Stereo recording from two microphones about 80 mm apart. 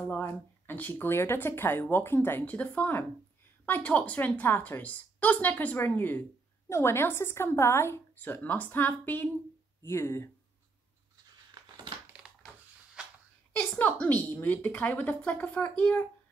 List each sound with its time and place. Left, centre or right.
0.2 s speech: left
9.8 s speech: left
13.6 s speech: centre